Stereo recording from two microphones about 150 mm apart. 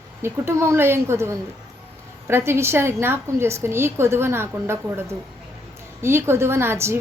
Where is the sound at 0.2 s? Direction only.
15° right (ahead or behind).